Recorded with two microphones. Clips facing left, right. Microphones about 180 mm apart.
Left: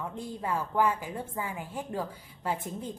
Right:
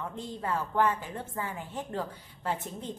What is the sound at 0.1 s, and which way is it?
A woman's voice, 10° left (ahead or behind).